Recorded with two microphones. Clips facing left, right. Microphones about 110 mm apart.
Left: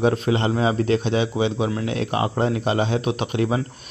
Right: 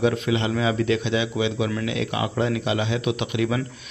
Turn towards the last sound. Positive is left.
turn(degrees=40)  # may be behind; listen again after turning